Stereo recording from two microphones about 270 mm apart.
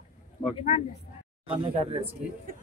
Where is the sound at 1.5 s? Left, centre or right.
Centre.